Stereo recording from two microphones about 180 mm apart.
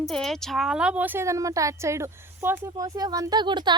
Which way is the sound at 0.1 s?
5° left (ahead or behind).